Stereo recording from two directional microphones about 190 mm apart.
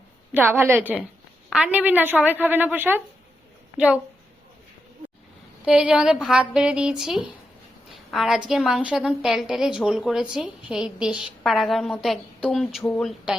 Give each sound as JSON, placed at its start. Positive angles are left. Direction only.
{"t": 0.3, "sound": "a woman's voice", "side_deg": -10}
{"t": 5.6, "sound": "a woman's voice", "side_deg": -5}
{"t": 7.9, "sound": "a sound", "side_deg": 0}
{"t": 8.4, "sound": "a woman's voice", "side_deg": 0}